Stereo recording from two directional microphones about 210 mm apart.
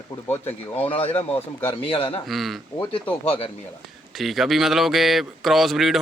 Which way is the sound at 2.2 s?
Centre (ahead or behind).